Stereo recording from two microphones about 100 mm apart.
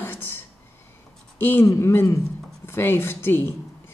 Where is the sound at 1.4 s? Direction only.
20° left (ahead or behind).